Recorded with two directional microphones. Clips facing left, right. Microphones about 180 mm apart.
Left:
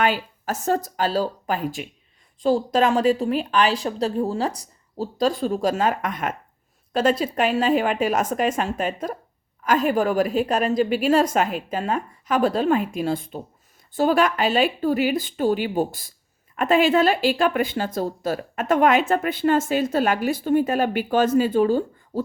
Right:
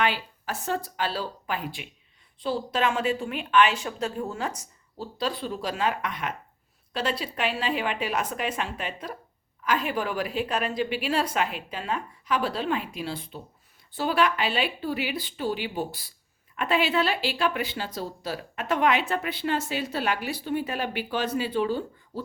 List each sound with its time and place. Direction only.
0.0 s a woman's voice: 45° left (ahead or behind)